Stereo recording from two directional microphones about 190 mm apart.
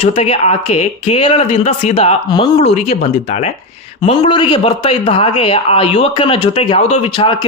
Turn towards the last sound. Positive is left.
turn(degrees=25)  # may be behind; listen again after turning